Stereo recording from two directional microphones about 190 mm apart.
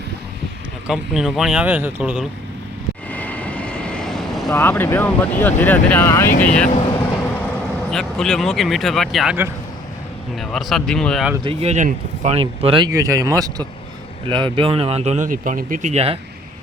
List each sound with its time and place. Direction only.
0.9 s speech: 5° right (ahead or behind)
3.1 s vehicle: 10° left (ahead or behind)
4.5 s speech: 10° left (ahead or behind)
7.9 s speech: centre (ahead or behind)
11.4 s speech: 35° right (ahead or behind)